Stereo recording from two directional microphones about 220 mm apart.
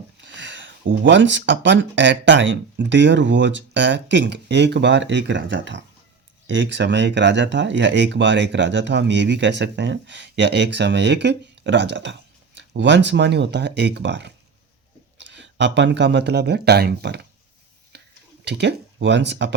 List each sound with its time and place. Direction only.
0.2 s speech: 55° right (ahead or behind)
17.9 s a sound: 50° right (ahead or behind)
18.4 s speech: 50° right (ahead or behind)